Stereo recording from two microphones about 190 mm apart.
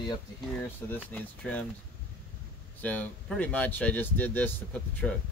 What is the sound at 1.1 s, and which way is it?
Speech, 5° left (ahead or behind).